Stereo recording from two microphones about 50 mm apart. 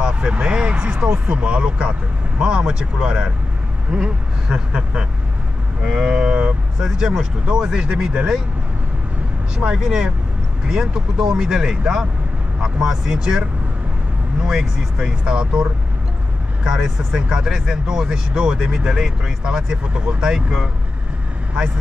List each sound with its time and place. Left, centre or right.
0.0 s speech: right
6.8 s speech: centre
9.8 s speech: centre